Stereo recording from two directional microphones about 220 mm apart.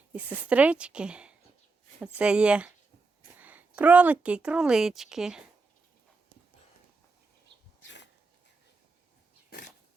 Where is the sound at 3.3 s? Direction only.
5° right (ahead or behind).